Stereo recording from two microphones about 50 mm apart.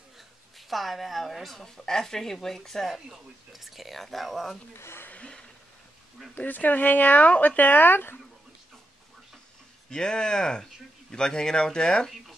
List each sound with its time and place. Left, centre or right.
0.6 s speech: centre
3.1 s speech: centre
4.7 s speech: left
5.1 s a sound: left
6.3 s speech: left
9.8 s speech: centre